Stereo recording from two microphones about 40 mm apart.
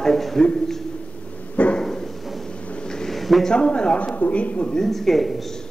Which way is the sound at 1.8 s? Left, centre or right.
Centre.